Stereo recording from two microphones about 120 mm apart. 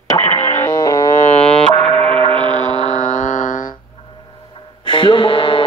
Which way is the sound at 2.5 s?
90° left.